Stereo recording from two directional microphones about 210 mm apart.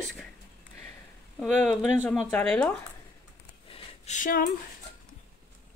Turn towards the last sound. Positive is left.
turn(degrees=40)  # may be behind; listen again after turning